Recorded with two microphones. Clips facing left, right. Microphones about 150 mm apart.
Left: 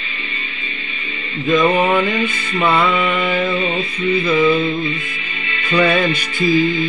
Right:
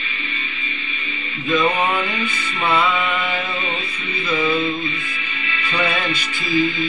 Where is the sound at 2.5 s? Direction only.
55° left (ahead or behind).